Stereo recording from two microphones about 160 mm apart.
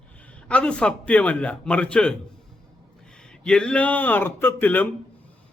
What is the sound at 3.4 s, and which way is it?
A man's voice, 5° left (ahead or behind).